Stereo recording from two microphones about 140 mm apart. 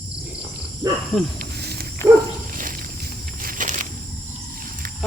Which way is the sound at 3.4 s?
75° right (ahead or behind).